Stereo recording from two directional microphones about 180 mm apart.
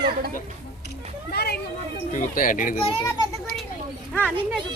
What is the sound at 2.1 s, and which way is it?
Speech, 45° left (ahead or behind).